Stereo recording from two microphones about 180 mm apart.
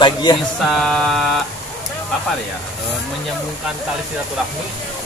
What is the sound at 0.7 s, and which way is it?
Speech, centre (ahead or behind).